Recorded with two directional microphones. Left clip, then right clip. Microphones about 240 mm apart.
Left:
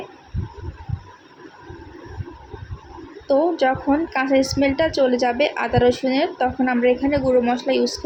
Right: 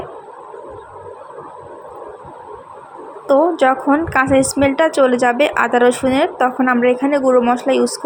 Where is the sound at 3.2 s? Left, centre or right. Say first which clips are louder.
Right 5 dB; centre.